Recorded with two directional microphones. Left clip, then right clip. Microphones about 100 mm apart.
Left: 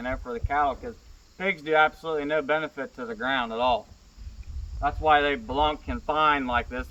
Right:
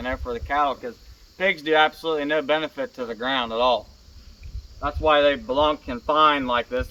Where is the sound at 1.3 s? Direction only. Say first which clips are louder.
Right 3 dB; 25° left (ahead or behind).